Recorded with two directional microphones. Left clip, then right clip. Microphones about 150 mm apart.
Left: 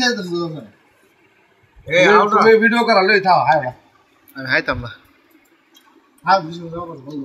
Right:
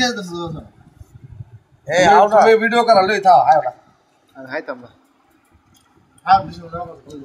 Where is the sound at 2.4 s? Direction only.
45° right (ahead or behind).